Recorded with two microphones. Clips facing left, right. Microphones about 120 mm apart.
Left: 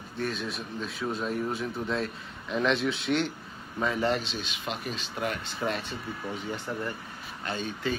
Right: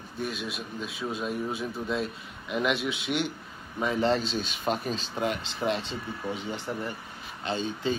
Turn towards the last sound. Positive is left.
turn(degrees=-25)  # may be behind; listen again after turning